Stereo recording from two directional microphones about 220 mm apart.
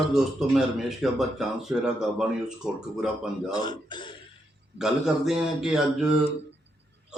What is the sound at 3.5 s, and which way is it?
Speech, 20° left (ahead or behind).